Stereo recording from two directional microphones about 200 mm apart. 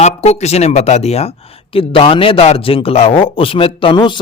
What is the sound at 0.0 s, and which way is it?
Speech, 35° left (ahead or behind).